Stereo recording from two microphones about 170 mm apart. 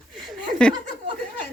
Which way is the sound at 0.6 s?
5° left (ahead or behind).